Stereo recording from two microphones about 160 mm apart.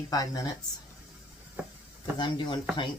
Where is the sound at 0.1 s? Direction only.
25° left (ahead or behind).